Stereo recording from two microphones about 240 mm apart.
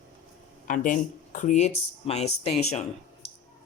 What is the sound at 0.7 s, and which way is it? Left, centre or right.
Speech, left.